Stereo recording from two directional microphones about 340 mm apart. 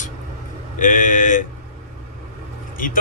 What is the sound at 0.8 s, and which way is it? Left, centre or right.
Speech, left.